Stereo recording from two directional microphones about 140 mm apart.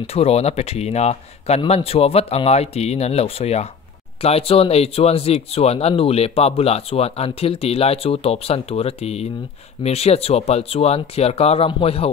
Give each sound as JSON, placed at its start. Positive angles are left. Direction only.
{"t": 0.0, "sound": "speech", "side_deg": 45}